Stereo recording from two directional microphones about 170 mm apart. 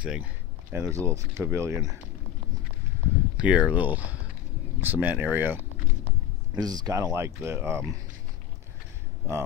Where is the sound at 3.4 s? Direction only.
5° right (ahead or behind).